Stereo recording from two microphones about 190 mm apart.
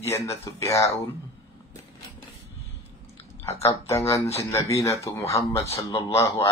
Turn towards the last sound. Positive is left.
turn(degrees=15)  # may be behind; listen again after turning